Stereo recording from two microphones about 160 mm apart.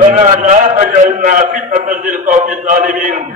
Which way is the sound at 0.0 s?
55° right (ahead or behind).